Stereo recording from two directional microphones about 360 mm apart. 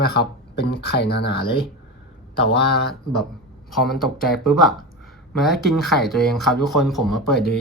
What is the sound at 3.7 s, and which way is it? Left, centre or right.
Speech, centre.